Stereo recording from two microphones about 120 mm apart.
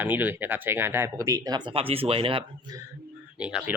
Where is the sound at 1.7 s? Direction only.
50° right (ahead or behind).